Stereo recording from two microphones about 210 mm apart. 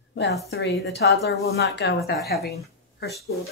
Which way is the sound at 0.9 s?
50° left (ahead or behind).